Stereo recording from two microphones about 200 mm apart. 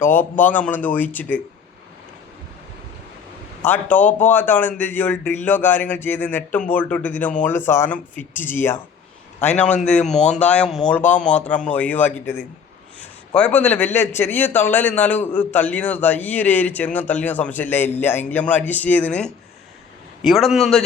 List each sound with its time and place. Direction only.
0.0 s speech: 10° left (ahead or behind)
3.6 s speech: 10° left (ahead or behind)
9.8 s a man's voice: 5° left (ahead or behind)
10.2 s speech: 35° left (ahead or behind)
10.4 s a man's voice: 5° left (ahead or behind)